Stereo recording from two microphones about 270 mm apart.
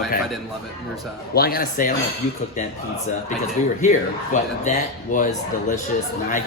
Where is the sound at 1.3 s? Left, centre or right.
Left.